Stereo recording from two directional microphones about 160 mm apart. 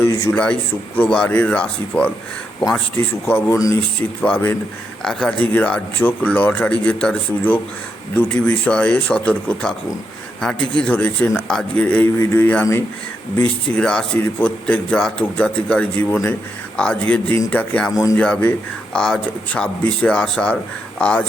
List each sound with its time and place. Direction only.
0.0 s a sound: 15° left (ahead or behind)
0.9 s a man's voice: 5° left (ahead or behind)
3.2 s a man's voice: 15° left (ahead or behind)